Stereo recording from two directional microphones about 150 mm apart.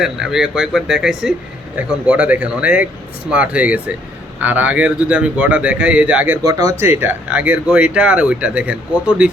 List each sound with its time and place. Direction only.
0.0 s speech: 5° right (ahead or behind)
6.4 s speech: 25° right (ahead or behind); by 9.3 s 5° right (ahead or behind)